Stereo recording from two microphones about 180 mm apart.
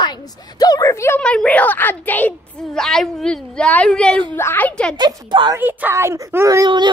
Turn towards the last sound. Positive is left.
turn(degrees=-20)  # may be behind; listen again after turning